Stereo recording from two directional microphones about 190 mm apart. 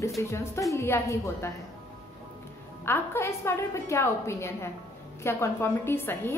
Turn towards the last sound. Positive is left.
turn(degrees=10)  # may be behind; listen again after turning